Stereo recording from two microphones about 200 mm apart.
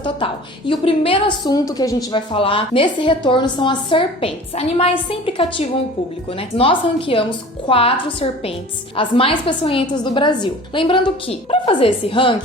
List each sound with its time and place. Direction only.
0.7 s a woman's voice: 25° left (ahead or behind)